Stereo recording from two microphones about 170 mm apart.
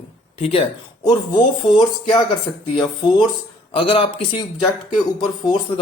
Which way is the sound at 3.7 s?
30° left (ahead or behind).